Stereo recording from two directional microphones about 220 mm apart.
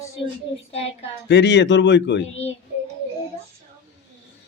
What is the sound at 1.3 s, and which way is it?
Speech, 50° left (ahead or behind).